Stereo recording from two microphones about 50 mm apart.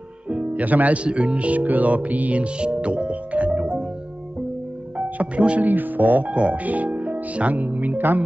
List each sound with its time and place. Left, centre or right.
0.3 s speech: right
4.9 s speech: right
5.7 s speech: right
6.3 s speech: right